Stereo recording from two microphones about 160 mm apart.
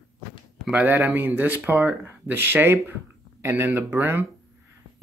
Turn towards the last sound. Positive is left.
turn(degrees=-15)  # may be behind; listen again after turning